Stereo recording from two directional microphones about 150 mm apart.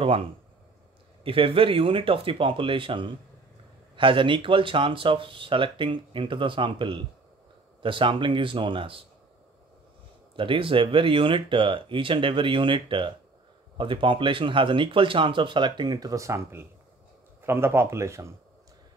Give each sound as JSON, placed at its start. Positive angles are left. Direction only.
{"t": 0.0, "sound": "speech", "side_deg": -40}
{"t": 10.3, "sound": "speech", "side_deg": -35}